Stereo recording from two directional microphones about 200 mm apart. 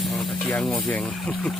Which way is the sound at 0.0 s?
Centre (ahead or behind).